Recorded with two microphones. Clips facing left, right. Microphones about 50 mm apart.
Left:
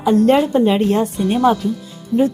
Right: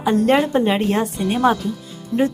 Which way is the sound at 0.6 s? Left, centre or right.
Centre.